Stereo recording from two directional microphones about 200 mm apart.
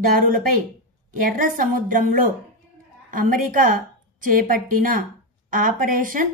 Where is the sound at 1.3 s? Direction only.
45° right (ahead or behind).